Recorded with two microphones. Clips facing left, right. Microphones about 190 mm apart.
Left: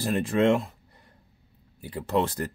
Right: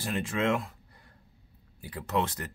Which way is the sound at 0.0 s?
35° left (ahead or behind).